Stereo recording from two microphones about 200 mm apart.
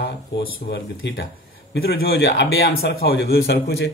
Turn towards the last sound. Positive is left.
turn(degrees=55)  # may be behind; listen again after turning